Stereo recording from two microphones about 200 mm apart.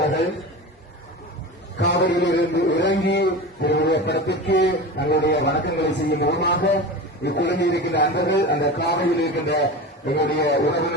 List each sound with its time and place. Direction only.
1.8 s a man's voice: 60° left (ahead or behind)